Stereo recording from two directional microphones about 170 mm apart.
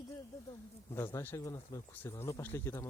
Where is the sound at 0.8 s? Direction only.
15° left (ahead or behind).